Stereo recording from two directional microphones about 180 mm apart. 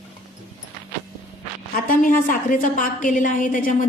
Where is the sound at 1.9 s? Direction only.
50° left (ahead or behind).